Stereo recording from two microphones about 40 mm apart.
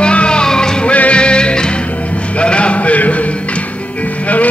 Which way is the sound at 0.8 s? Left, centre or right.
Left.